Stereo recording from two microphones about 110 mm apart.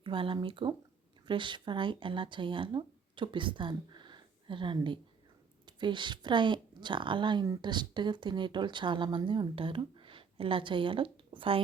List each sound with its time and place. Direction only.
0.0 s a woman's voice: 50° right (ahead or behind)